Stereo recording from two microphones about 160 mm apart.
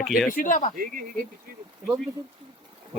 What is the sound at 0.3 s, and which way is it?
Speech, 55° left (ahead or behind).